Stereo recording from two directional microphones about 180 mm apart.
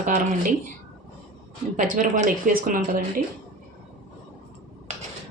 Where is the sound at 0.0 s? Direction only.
45° right (ahead or behind).